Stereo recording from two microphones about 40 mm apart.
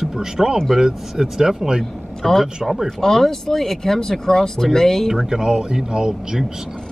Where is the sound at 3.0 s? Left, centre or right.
Centre.